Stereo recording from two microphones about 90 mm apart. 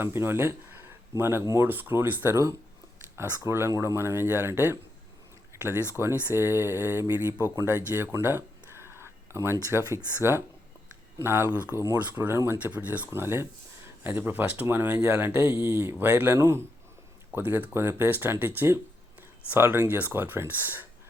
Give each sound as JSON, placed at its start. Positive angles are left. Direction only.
{"t": 0.0, "sound": "speech", "side_deg": -25}
{"t": 2.3, "sound": "speech", "side_deg": -35}
{"t": 12.6, "sound": "speech", "side_deg": -15}